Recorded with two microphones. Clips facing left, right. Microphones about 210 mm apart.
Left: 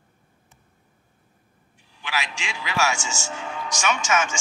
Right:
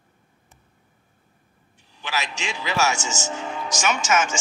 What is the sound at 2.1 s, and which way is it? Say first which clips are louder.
A man's voice: right 2 dB; 40° right (ahead or behind).